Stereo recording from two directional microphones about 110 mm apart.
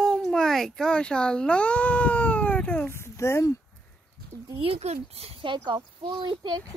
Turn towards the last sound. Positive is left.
turn(degrees=-50)  # may be behind; listen again after turning